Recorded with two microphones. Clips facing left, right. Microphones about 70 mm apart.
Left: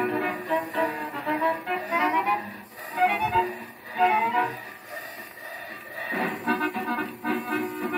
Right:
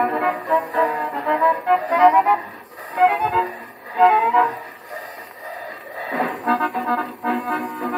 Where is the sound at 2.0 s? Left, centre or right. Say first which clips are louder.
Right 10 dB; right.